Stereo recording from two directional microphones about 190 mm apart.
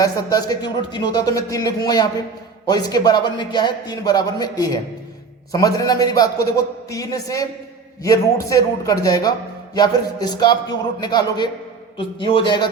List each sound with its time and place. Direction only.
0.0 s a man's voice: 20° left (ahead or behind)